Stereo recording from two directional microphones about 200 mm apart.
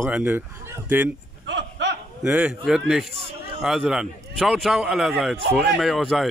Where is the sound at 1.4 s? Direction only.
60° right (ahead or behind).